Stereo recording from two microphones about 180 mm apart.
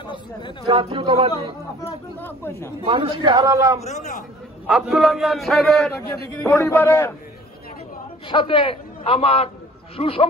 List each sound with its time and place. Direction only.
0.0 s a man's voice: 25° left (ahead or behind)
0.7 s a man's voice: 30° right (ahead or behind)
2.1 s speech: 10° left (ahead or behind)
2.9 s a man's voice: 25° right (ahead or behind)
3.8 s a man's voice: 40° left (ahead or behind)
4.6 s a man's voice: 5° right (ahead or behind)
6.5 s a man's voice: 15° left (ahead or behind)
8.3 s a man's voice: 25° left (ahead or behind)